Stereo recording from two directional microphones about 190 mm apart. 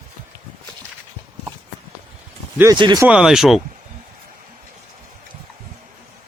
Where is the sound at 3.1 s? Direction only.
5° right (ahead or behind).